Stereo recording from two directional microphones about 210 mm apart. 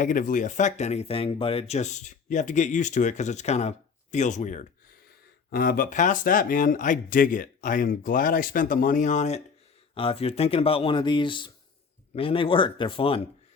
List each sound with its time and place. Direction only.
0.0 s speech: 40° left (ahead or behind)